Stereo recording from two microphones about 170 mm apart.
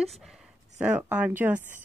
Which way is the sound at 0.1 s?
Centre (ahead or behind).